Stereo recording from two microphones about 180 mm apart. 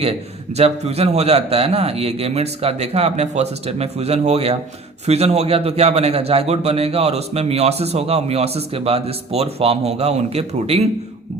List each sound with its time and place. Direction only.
0.5 s a man's voice: 35° right (ahead or behind)